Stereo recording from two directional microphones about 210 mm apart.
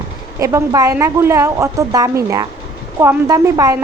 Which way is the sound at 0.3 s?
15° right (ahead or behind).